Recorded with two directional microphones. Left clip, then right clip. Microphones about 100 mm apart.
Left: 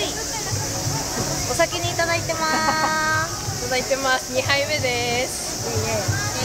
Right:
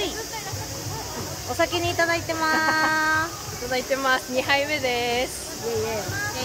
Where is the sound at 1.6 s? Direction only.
30° left (ahead or behind).